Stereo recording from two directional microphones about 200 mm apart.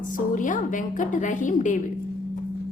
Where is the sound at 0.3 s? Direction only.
40° left (ahead or behind).